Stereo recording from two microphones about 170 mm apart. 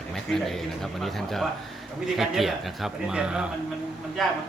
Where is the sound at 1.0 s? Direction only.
Centre (ahead or behind).